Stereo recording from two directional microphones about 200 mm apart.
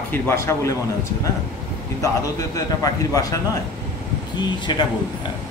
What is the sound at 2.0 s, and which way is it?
A man's voice, 15° left (ahead or behind).